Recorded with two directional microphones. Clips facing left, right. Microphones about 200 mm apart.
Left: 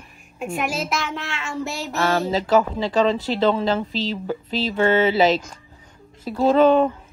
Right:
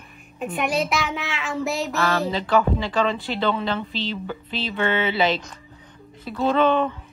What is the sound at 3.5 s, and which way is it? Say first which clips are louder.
A woman's voice: left 3 dB; 35° left (ahead or behind).